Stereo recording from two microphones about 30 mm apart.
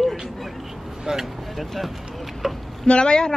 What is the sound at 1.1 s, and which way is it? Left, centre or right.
Speech, right.